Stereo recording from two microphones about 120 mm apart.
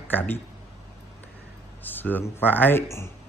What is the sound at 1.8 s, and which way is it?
A man's voice, 15° left (ahead or behind).